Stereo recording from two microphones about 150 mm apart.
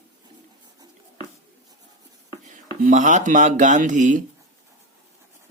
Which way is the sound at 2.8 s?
55° right (ahead or behind).